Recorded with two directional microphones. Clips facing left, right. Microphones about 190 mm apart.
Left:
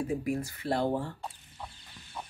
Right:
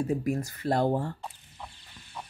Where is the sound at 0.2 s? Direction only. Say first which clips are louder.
Right 2 dB; 40° right (ahead or behind).